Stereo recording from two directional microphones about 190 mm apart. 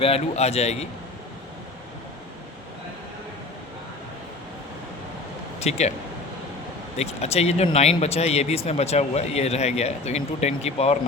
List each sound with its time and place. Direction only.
0.0 s speech: 35° left (ahead or behind)
5.5 s speech: 35° left (ahead or behind)
6.9 s speech: 35° left (ahead or behind)